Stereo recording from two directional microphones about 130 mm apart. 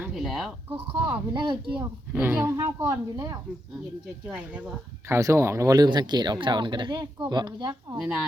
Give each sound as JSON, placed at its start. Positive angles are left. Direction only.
{"t": 0.1, "sound": "speech", "side_deg": 0}
{"t": 0.7, "sound": "speech", "side_deg": -15}
{"t": 1.3, "sound": "speech", "side_deg": -35}
{"t": 1.7, "sound": "a woman's voice", "side_deg": -15}
{"t": 5.0, "sound": "speech", "side_deg": -20}
{"t": 7.9, "sound": "speech", "side_deg": -5}